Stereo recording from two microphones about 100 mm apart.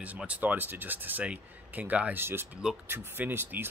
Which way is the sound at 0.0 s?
15° right (ahead or behind).